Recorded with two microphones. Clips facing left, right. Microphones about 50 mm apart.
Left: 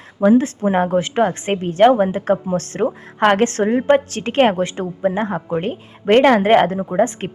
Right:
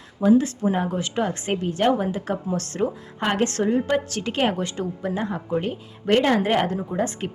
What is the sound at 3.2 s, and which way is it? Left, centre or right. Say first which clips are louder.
Speech: left 8 dB; left.